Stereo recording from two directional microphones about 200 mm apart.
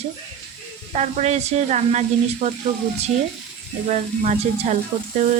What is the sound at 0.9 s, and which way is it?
Speech, 35° right (ahead or behind).